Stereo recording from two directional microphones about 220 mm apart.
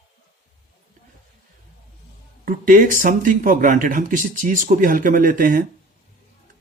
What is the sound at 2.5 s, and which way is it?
Speech, 40° right (ahead or behind).